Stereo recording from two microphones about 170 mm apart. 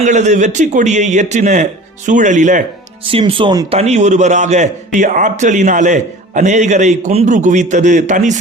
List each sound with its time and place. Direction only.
0.0 s a man's voice: 45° right (ahead or behind)
3.1 s speech: 30° right (ahead or behind)
3.7 s a man's voice: 40° right (ahead or behind)